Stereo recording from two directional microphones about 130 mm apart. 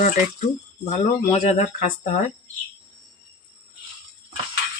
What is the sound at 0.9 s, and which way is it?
Speech, 70° left (ahead or behind).